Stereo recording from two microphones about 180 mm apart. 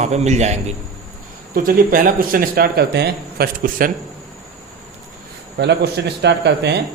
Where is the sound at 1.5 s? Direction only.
50° right (ahead or behind).